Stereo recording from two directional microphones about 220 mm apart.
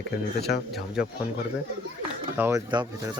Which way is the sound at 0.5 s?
50° left (ahead or behind).